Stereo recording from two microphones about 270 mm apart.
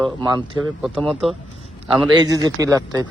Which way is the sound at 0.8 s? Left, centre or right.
Centre.